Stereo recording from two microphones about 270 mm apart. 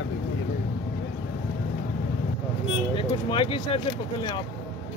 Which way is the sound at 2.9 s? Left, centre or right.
Centre.